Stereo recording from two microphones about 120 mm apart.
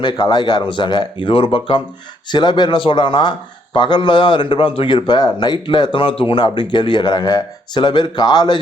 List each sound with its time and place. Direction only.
0.0 s a man's voice: 35° left (ahead or behind)